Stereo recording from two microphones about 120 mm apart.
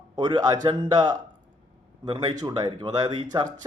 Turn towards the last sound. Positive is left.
turn(degrees=-40)  # may be behind; listen again after turning